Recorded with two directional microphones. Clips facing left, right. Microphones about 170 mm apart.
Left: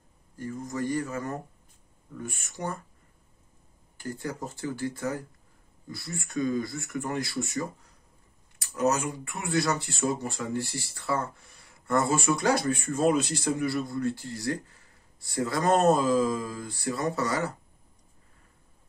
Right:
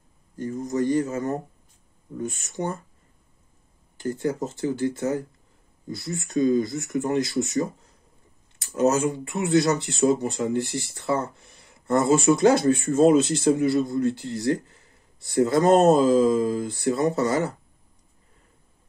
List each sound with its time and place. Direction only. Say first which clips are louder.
0.6 s speech: right 7 dB; 20° right (ahead or behind)
4.0 s speech: right 8 dB; 20° right (ahead or behind)